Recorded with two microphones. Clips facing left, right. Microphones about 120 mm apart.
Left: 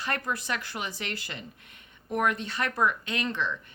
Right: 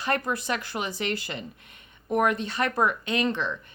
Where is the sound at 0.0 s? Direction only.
20° right (ahead or behind).